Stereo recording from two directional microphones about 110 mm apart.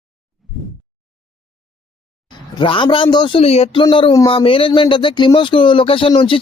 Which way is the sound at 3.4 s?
70° left (ahead or behind).